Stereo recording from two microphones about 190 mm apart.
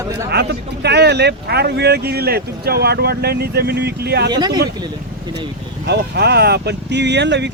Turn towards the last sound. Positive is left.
turn(degrees=-65)  # may be behind; listen again after turning